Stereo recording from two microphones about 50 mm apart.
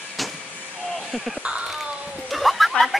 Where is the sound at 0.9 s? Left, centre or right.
Centre.